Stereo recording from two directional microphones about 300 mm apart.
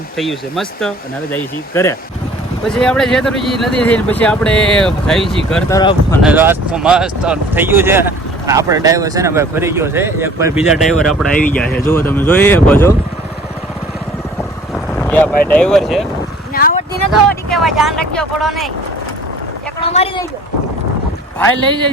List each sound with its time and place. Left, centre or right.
0.2 s speech: centre
6.2 s speech: centre
14.9 s speech: centre
16.6 s vehicle: left
17.1 s speech: centre
19.9 s speech: left
21.4 s speech: centre